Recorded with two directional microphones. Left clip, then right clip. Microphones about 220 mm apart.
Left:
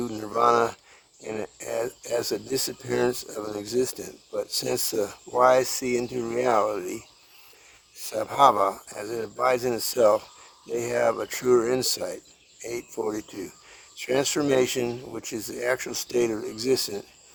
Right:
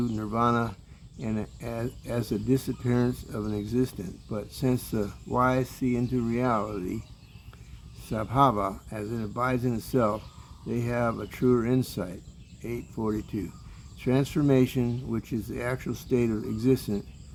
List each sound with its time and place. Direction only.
0.0 s speech: 50° left (ahead or behind)
8.0 s speech: 50° left (ahead or behind)